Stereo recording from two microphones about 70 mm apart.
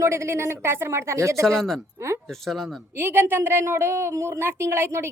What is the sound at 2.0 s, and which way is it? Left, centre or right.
Speech, right.